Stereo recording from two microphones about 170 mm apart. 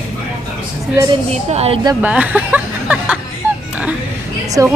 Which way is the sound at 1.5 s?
40° right (ahead or behind).